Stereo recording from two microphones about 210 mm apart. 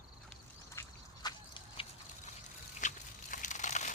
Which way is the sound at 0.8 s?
20° left (ahead or behind).